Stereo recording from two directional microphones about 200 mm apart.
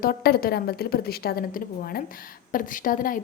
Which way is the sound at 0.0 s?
50° left (ahead or behind).